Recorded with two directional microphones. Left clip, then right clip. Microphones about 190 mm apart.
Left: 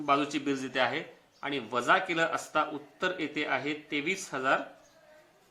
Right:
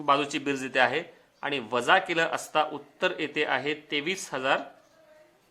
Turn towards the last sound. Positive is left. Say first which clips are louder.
# right 2 dB
turn(degrees=-35)  # may be behind; listen again after turning